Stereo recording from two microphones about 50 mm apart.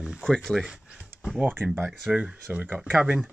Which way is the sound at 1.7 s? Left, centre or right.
Centre.